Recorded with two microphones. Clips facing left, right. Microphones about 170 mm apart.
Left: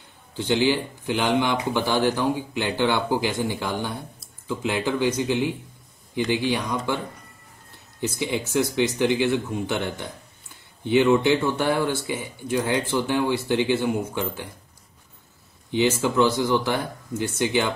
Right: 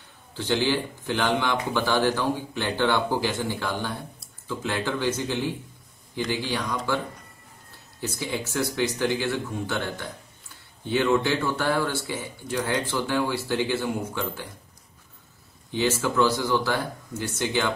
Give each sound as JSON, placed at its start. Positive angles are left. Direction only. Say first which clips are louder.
{"t": 0.4, "sound": "speech", "louder": "left 3 dB", "side_deg": 15}
{"t": 8.0, "sound": "speech", "louder": "left 4 dB", "side_deg": 20}
{"t": 15.7, "sound": "speech", "louder": "left 3 dB", "side_deg": 20}